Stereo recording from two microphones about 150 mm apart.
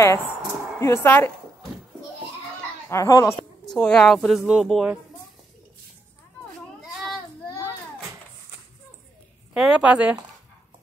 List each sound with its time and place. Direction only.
0.0 s speech: 20° left (ahead or behind)
2.9 s speech: 20° left (ahead or behind)
3.6 s speech: 5° left (ahead or behind)
9.5 s a woman's voice: 5° right (ahead or behind)